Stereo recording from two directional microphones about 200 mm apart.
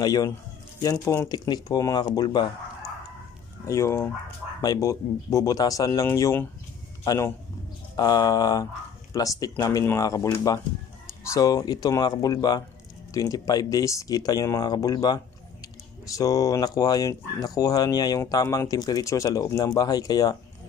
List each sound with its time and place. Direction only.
0.0 s speech: 20° left (ahead or behind)
3.6 s speech: 15° left (ahead or behind)